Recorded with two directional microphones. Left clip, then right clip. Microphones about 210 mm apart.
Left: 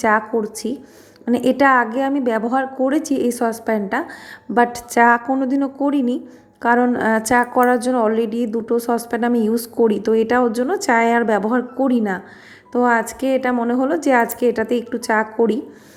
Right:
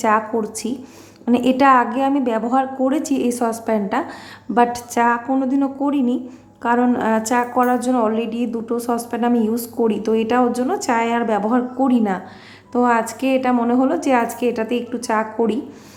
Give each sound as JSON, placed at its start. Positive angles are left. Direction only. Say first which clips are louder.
{"t": 0.0, "sound": "a woman's voice", "louder": "left 1 dB", "side_deg": 15}